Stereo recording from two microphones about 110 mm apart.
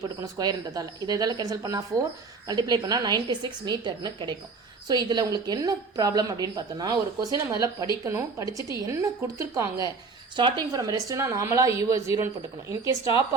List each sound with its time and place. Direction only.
0.2 s speech: 35° right (ahead or behind)
10.3 s a woman's voice: 50° right (ahead or behind)
10.7 s a woman's voice: 30° right (ahead or behind)